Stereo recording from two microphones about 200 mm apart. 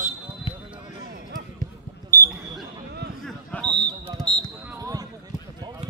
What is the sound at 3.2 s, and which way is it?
Basketball bounce, 5° left (ahead or behind).